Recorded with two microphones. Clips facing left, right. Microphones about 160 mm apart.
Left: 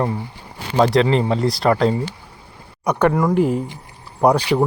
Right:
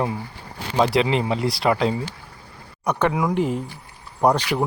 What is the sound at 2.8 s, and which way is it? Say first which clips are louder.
Speech: left 4 dB; 10° left (ahead or behind).